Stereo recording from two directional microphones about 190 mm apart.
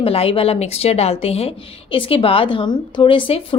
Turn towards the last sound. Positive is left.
turn(degrees=25)  # may be behind; listen again after turning